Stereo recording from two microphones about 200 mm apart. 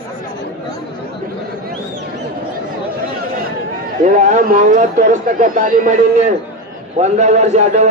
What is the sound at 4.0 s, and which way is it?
Speech, 40° right (ahead or behind).